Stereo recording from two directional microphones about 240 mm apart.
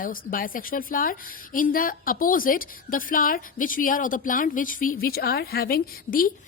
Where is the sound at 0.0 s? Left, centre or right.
Left.